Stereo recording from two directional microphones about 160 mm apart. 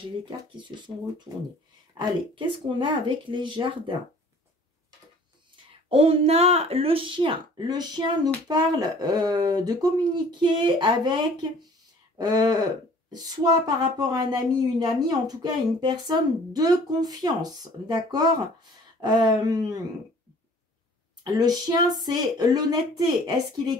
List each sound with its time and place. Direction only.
0.2 s speech: 30° right (ahead or behind)
5.9 s speech: 35° right (ahead or behind)
12.2 s speech: 25° right (ahead or behind)
21.3 s speech: 25° right (ahead or behind)